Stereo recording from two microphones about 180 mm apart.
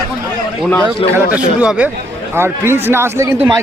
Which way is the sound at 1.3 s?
5° right (ahead or behind).